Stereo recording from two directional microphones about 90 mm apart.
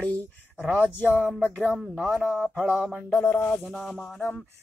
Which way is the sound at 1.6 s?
Centre (ahead or behind).